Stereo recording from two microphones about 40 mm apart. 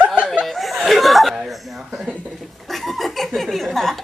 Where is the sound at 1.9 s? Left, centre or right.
Right.